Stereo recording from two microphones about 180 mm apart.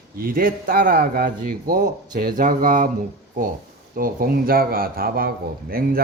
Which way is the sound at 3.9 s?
50° right (ahead or behind).